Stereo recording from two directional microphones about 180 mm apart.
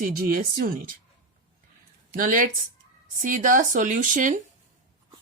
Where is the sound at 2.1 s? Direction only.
50° right (ahead or behind).